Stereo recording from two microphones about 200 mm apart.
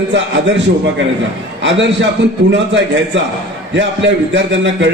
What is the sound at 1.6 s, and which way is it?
Speech, 65° right (ahead or behind).